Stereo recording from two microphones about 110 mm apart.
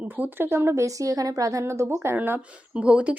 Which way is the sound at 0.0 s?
15° right (ahead or behind).